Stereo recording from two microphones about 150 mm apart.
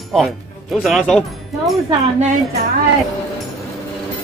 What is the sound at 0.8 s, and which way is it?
Speech, centre (ahead or behind).